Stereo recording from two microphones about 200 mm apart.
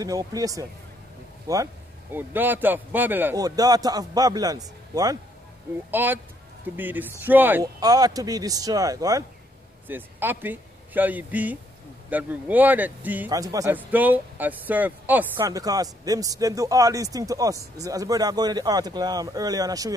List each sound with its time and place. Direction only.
0.0 s a man's voice: 15° right (ahead or behind)
2.1 s a man's voice: 10° right (ahead or behind)